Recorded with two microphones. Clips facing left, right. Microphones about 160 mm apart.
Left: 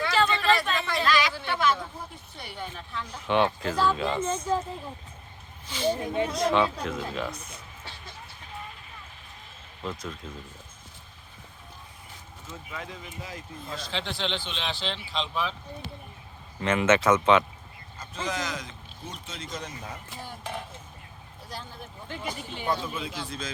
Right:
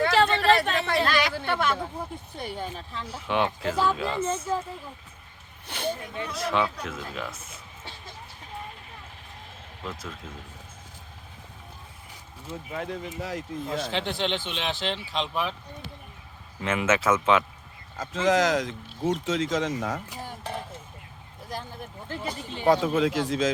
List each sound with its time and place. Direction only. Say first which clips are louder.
0.0 s a sound: right 3 dB; 60° right (ahead or behind)
2.4 s speech: right 5 dB; 45° right (ahead or behind)
2.7 s speech: even; 30° right (ahead or behind)
3.1 s speech: left 2 dB; 5° right (ahead or behind)
5.6 s speech: left 3 dB; 60° right (ahead or behind)
6.0 s speech: left 7 dB; 25° left (ahead or behind)
6.3 s speech: even; 5° right (ahead or behind)
9.8 s speech: left 2 dB; 5° right (ahead or behind)
12.7 s speech: right 7 dB; 55° right (ahead or behind)
13.2 s speech: right 8 dB; 70° right (ahead or behind); by 15.3 s 50° right (ahead or behind)
16.6 s speech: left 2 dB; 5° right (ahead or behind)
17.9 s speech: right 10 dB; 90° right
22.1 s speech: right 2 dB; centre (ahead or behind)
22.6 s speech: right 10 dB; 90° right